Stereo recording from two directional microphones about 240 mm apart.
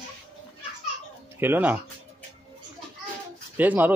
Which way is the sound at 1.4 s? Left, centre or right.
Centre.